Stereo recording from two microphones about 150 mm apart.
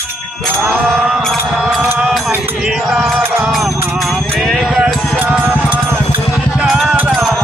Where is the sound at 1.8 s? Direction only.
15° right (ahead or behind).